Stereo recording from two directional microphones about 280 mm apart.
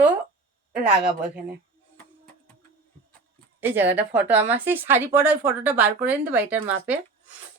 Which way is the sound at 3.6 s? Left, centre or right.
Centre.